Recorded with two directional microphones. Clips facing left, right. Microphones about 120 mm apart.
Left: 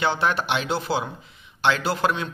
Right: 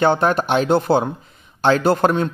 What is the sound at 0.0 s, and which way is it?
A man's voice, 45° right (ahead or behind).